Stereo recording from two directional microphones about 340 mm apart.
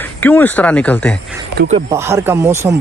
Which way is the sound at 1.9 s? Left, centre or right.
Centre.